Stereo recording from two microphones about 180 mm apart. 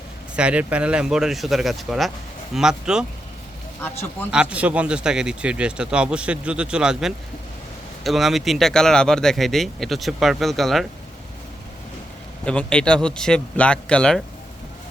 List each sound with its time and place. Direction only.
0.3 s speech: 5° right (ahead or behind)
3.8 s speech: 10° left (ahead or behind)
4.3 s speech: 5° right (ahead or behind)
12.5 s speech: 5° left (ahead or behind)